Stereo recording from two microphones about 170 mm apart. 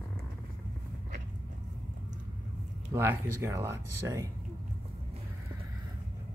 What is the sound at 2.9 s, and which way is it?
Speech, 15° right (ahead or behind).